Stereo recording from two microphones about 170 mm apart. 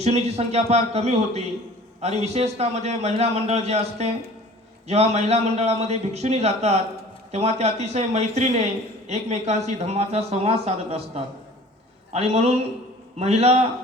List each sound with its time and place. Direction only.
0.0 s a man's voice: 40° right (ahead or behind)